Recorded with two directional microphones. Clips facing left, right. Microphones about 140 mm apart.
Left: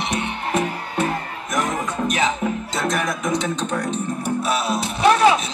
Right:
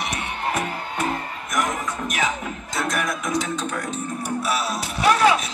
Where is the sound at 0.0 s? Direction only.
25° left (ahead or behind).